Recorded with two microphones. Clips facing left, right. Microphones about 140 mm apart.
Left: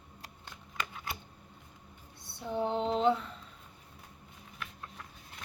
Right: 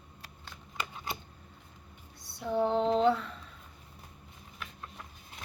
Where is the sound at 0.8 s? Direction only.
20° right (ahead or behind).